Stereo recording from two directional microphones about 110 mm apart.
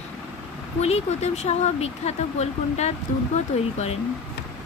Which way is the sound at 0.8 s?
75° left (ahead or behind).